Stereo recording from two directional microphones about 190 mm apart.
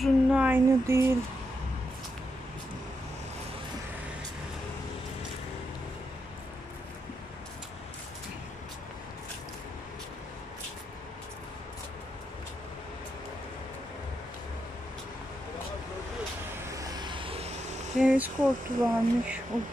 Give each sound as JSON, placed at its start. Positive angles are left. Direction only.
{"t": 0.0, "sound": "a sound", "side_deg": -5}
{"t": 16.6, "sound": "vehicle", "side_deg": -20}
{"t": 18.0, "sound": "speech", "side_deg": -5}